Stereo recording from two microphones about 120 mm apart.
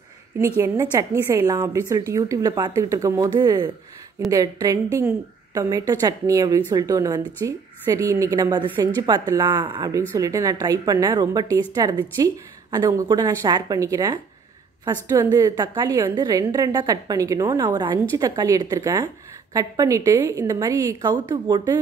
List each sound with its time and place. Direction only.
0.6 s a woman's voice: 25° right (ahead or behind)
1.5 s a woman's voice: 30° right (ahead or behind)
3.3 s a woman's voice: 40° right (ahead or behind)
4.3 s a woman's voice: 30° right (ahead or behind)